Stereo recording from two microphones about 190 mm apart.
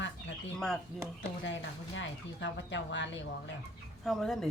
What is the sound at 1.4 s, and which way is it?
Speech, 75° left (ahead or behind).